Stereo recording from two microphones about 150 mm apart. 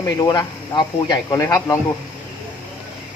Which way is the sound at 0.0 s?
25° left (ahead or behind).